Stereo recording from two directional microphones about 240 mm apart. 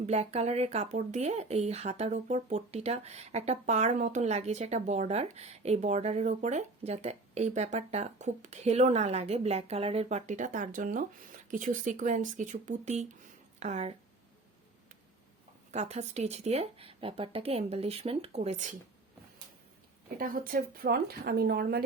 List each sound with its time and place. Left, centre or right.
0.0 s speech: right
15.7 s speech: right
20.1 s speech: right